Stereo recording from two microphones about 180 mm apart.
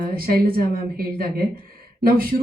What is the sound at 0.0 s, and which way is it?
A woman's voice, 55° right (ahead or behind).